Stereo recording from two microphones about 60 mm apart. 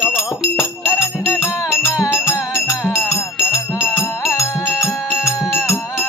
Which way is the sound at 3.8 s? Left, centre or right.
Left.